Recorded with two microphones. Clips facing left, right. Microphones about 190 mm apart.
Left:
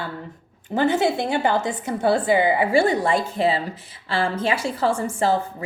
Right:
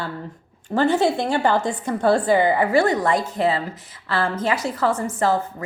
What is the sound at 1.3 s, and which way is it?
Speech, 20° left (ahead or behind).